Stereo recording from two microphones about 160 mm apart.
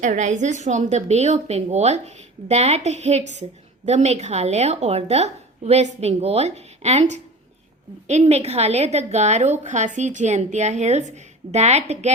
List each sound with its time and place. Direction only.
0.0 s a woman's voice: 50° right (ahead or behind)